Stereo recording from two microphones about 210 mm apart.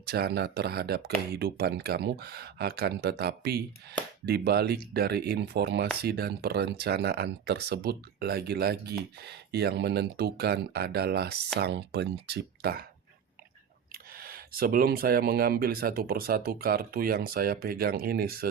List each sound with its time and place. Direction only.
0.0 s speech: 50° right (ahead or behind)
13.9 s speech: 45° right (ahead or behind)